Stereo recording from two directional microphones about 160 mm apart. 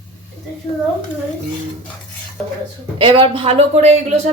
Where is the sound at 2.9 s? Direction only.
35° right (ahead or behind).